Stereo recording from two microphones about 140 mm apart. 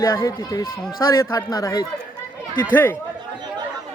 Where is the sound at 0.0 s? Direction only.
25° left (ahead or behind).